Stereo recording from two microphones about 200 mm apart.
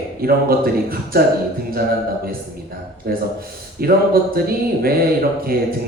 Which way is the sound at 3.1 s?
50° right (ahead or behind).